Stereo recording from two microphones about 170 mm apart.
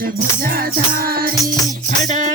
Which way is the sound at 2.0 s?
45° right (ahead or behind).